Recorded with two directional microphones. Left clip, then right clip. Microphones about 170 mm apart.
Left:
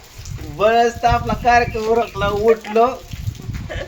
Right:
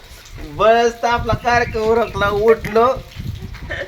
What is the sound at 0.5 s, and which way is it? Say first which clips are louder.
A man's voice: right 2 dB; 20° right (ahead or behind).